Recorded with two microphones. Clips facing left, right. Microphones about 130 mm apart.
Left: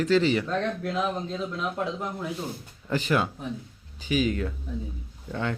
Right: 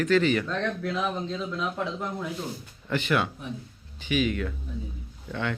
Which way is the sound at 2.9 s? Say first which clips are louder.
Left 1 dB; 35° left (ahead or behind).